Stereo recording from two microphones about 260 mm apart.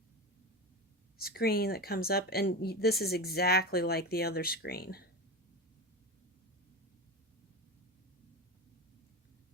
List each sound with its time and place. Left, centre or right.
1.2 s speech: left